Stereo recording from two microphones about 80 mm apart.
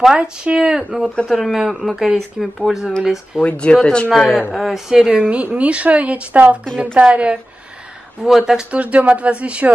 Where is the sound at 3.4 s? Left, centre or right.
Centre.